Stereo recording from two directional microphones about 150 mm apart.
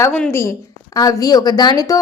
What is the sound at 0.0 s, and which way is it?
A woman's voice, 15° left (ahead or behind).